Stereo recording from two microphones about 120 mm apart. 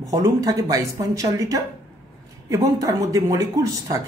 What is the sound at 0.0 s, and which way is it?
Speech, 30° right (ahead or behind).